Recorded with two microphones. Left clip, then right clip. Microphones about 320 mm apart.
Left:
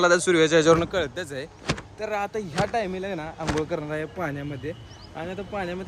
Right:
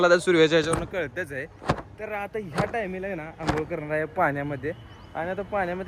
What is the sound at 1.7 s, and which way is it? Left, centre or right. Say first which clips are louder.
Vehicle: right 3 dB; centre.